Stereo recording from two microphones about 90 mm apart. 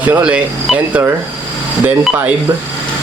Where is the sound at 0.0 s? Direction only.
15° right (ahead or behind).